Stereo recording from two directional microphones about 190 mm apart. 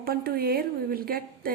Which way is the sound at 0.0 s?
50° right (ahead or behind).